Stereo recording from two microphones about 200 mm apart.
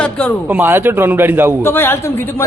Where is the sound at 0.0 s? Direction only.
5° left (ahead or behind).